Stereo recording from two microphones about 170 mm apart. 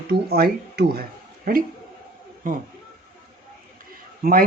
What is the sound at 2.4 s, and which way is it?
Speech, 55° right (ahead or behind).